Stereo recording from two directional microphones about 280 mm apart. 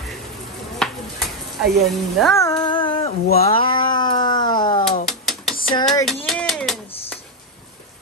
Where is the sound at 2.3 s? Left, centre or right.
Centre.